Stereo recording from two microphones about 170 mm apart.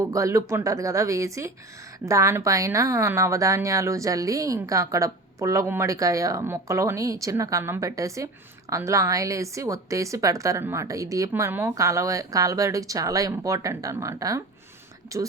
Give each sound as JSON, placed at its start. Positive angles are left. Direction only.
{"t": 0.0, "sound": "a woman's voice", "side_deg": -15}